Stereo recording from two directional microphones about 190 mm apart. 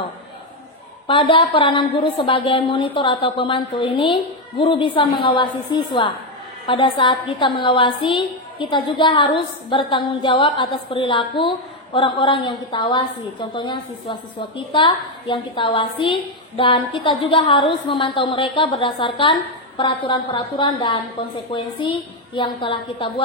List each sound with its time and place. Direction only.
1.0 s a woman's voice: 25° left (ahead or behind)